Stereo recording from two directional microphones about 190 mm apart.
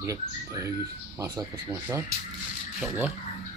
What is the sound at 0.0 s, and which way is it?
Speech, 15° right (ahead or behind).